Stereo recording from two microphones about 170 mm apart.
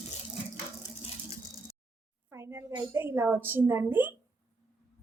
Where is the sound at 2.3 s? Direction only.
15° right (ahead or behind).